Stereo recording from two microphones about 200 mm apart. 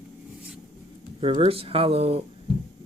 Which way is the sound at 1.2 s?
30° right (ahead or behind).